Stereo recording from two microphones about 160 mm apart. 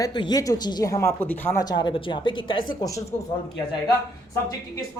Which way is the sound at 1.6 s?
25° left (ahead or behind).